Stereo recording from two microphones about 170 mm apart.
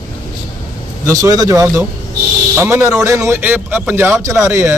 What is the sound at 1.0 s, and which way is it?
Speech, 20° right (ahead or behind).